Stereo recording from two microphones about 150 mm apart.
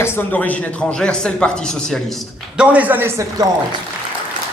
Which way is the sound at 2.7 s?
10° right (ahead or behind).